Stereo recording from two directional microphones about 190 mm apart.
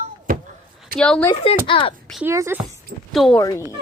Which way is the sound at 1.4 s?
25° left (ahead or behind).